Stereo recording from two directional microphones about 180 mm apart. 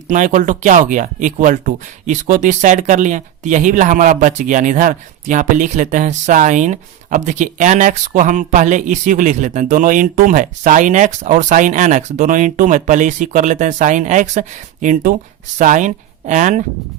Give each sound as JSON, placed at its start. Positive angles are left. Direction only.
{"t": 0.1, "sound": "speech", "side_deg": -45}